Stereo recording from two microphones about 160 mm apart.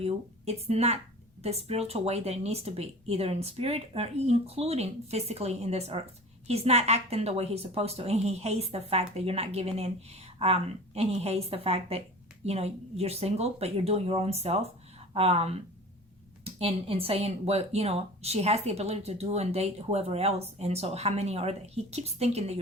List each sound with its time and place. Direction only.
0.0 s speech: 40° right (ahead or behind)